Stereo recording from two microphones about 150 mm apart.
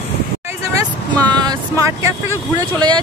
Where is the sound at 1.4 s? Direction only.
20° right (ahead or behind).